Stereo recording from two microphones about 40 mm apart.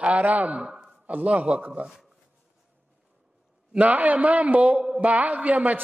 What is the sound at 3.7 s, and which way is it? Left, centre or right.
A man's voice, right.